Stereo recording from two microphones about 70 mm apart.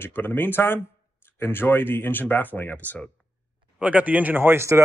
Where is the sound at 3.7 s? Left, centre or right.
Centre.